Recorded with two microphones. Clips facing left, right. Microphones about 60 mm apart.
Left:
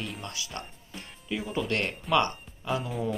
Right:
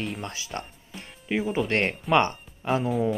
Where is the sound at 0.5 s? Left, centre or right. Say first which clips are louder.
Right 4 dB; right.